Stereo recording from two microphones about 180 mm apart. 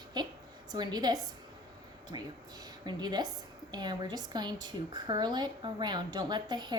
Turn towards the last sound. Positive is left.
turn(degrees=-25)  # may be behind; listen again after turning